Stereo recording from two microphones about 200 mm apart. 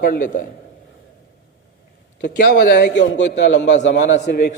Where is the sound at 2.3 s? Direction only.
50° left (ahead or behind).